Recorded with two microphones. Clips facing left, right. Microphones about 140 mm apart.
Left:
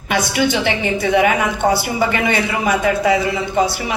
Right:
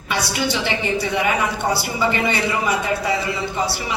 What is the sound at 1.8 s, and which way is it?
A man's voice, 55° left (ahead or behind).